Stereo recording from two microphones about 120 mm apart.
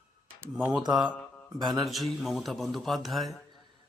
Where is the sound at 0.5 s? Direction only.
10° right (ahead or behind).